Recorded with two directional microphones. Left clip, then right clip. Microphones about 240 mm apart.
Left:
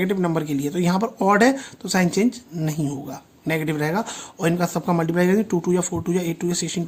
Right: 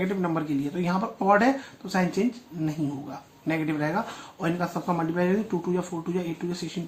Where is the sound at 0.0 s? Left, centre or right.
Left.